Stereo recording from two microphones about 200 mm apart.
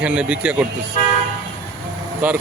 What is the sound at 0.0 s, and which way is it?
Speech, 5° right (ahead or behind).